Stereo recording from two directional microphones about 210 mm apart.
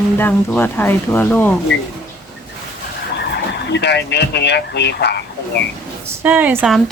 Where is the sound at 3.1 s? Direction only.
55° left (ahead or behind).